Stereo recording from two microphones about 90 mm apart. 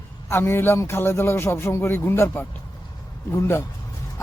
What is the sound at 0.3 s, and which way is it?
A man's voice, 25° left (ahead or behind).